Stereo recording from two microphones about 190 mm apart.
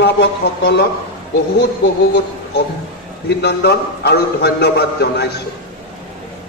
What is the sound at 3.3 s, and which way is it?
A man's voice, 60° left (ahead or behind).